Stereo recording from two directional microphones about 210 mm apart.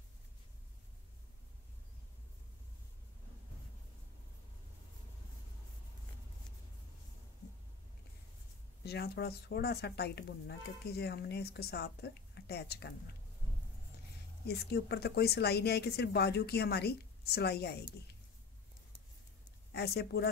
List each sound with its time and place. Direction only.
8.8 s a woman's voice: 50° left (ahead or behind)
14.4 s a woman's voice: 50° left (ahead or behind)
19.7 s a woman's voice: 50° left (ahead or behind)